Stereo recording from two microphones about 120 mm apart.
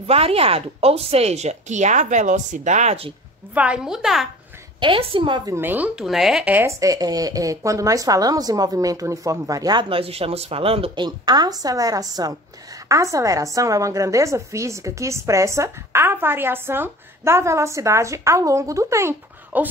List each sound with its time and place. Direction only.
0.0 s speech: 55° right (ahead or behind); by 3.0 s 85° right
3.5 s a woman's voice: 10° right (ahead or behind)
4.7 s a woman's voice: 45° right (ahead or behind)
5.5 s speech: 15° right (ahead or behind)
5.9 s a woman's voice: 5° right (ahead or behind)
6.8 s a woman's voice: 30° right (ahead or behind); by 11.1 s 50° right (ahead or behind)
11.1 s a woman's voice: 35° right (ahead or behind); by 19.7 s 20° right (ahead or behind)